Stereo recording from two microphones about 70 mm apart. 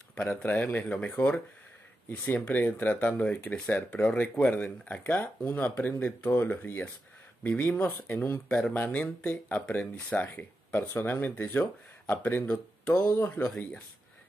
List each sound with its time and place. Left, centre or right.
0.1 s speech: centre
0.6 s speech: left
0.8 s speech: centre
12.9 s speech: left